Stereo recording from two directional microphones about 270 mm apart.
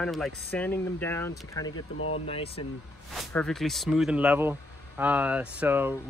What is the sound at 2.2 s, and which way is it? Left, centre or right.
Speech, left.